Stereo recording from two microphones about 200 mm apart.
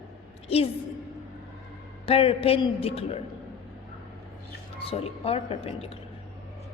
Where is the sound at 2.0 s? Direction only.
30° left (ahead or behind).